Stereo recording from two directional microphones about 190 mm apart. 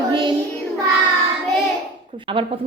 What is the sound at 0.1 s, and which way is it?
Child singing, 25° right (ahead or behind).